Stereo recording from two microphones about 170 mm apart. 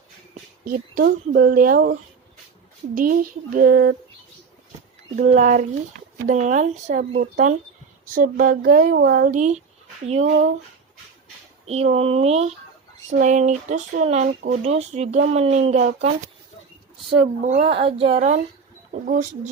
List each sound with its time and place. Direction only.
0.6 s speech: 55° right (ahead or behind)
5.1 s speech: 50° right (ahead or behind)
11.6 s speech: 40° right (ahead or behind)
17.1 s speech: 40° right (ahead or behind)